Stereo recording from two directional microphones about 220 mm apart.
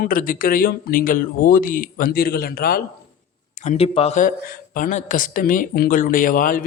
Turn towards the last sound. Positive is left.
turn(degrees=40)  # may be behind; listen again after turning